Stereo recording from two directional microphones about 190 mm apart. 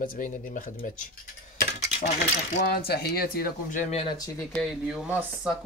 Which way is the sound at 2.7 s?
55° left (ahead or behind).